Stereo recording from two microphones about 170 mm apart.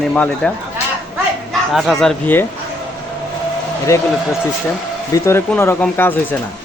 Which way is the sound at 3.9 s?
20° left (ahead or behind).